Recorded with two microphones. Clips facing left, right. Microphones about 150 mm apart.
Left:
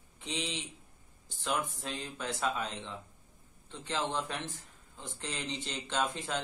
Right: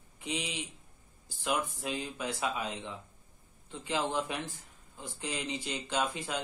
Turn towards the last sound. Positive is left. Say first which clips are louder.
# even
turn(degrees=-5)  # may be behind; listen again after turning